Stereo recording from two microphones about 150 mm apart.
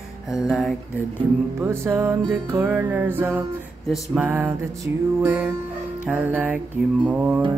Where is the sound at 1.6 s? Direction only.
15° right (ahead or behind).